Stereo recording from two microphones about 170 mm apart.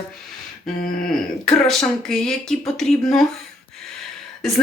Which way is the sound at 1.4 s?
Centre (ahead or behind).